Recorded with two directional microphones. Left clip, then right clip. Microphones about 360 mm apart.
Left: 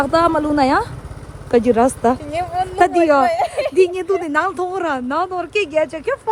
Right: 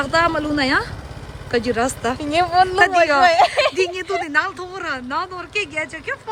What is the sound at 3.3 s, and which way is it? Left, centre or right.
Speech, right.